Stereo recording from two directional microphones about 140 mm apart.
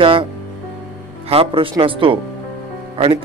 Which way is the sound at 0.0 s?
40° right (ahead or behind).